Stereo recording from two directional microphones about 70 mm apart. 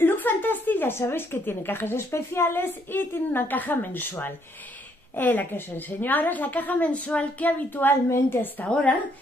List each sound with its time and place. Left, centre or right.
0.0 s a woman's voice: left
5.1 s a woman's voice: left
8.6 s a woman's voice: centre